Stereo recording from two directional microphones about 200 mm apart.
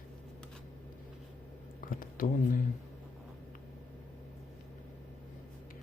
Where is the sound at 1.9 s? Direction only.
45° left (ahead or behind).